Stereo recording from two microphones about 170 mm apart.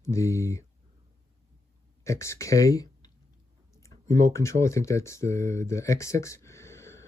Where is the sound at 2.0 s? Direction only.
15° left (ahead or behind).